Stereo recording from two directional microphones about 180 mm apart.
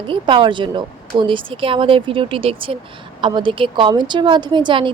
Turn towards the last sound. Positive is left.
turn(degrees=-25)  # may be behind; listen again after turning